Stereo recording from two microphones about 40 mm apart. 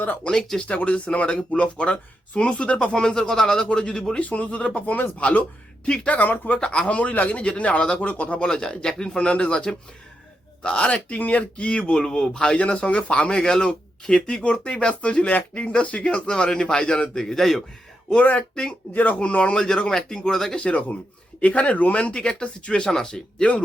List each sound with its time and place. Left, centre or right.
0.5 s speech: centre
0.9 s a man's voice: left
4.2 s a man's voice: left
6.1 s speech: left
6.6 s a man's voice: left
8.4 s speech: centre
12.5 s a man's voice: left; by 17.6 s centre
18.2 s a man's voice: left
19.5 s speech: centre
20.6 s a man's voice: left; by 23.2 s centre
23.4 s speech: left